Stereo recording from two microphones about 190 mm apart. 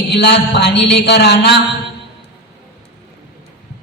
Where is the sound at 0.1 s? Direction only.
60° left (ahead or behind).